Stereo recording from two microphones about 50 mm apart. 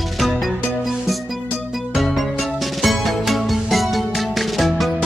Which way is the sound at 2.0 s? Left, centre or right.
Centre.